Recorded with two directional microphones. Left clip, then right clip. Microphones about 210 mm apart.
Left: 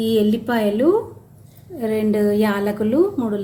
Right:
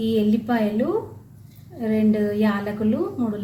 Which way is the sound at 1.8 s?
60° left (ahead or behind).